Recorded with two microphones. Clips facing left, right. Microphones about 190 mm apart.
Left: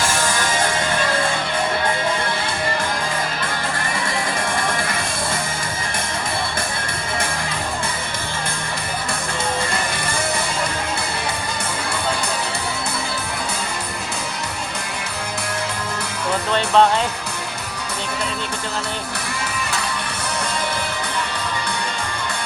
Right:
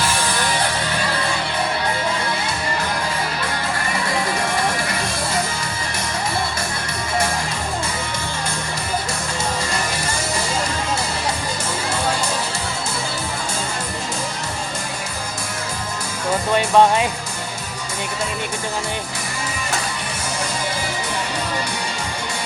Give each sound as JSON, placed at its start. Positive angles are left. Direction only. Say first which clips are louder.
{"t": 0.0, "sound": "music", "louder": "left 1 dB", "side_deg": 45}
{"t": 16.5, "sound": "music", "louder": "right 1 dB", "side_deg": -10}